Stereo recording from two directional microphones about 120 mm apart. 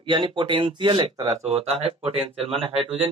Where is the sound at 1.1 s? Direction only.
25° right (ahead or behind).